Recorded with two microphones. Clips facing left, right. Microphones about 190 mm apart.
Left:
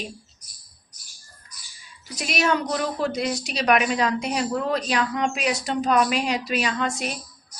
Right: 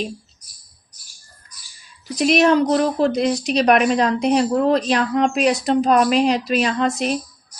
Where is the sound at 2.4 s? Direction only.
40° right (ahead or behind).